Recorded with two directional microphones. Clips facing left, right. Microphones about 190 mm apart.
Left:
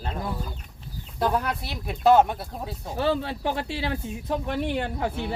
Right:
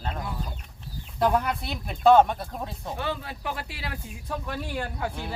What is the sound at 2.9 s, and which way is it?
Speech, 30° left (ahead or behind).